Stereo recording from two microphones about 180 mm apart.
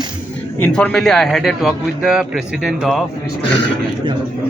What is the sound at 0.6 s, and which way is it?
A man's voice, 5° left (ahead or behind).